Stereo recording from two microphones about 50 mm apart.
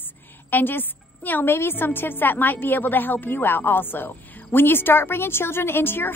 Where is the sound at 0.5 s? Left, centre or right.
Left.